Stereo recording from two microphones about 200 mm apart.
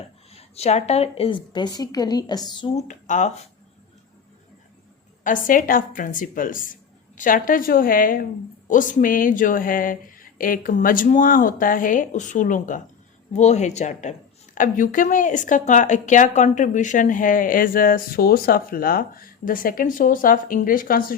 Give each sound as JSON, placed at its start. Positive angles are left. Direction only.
{"t": 0.3, "sound": "a woman's voice", "side_deg": 30}
{"t": 5.2, "sound": "a woman's voice", "side_deg": 40}